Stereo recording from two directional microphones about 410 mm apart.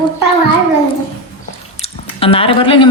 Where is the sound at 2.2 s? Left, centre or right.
Centre.